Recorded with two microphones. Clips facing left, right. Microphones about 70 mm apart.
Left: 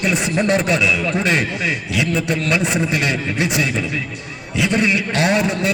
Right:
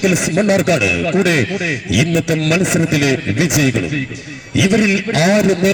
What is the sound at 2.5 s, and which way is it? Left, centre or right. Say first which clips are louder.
A man's voice: right 4 dB; centre.